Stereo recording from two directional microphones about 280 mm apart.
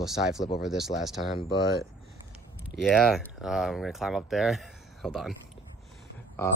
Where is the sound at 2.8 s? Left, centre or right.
Centre.